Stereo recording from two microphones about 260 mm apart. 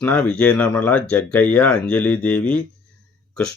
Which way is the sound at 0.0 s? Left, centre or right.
Centre.